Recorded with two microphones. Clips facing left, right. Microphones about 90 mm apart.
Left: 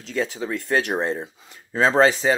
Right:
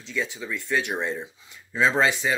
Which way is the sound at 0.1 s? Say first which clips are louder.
Left 5 dB; 40° left (ahead or behind).